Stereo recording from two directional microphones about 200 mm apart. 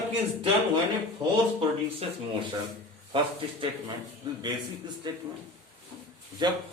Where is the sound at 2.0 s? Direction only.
30° right (ahead or behind).